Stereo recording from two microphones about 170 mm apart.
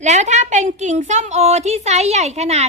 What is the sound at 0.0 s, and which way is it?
A woman's voice, 45° right (ahead or behind).